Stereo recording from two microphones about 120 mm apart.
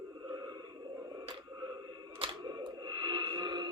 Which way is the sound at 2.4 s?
35° right (ahead or behind).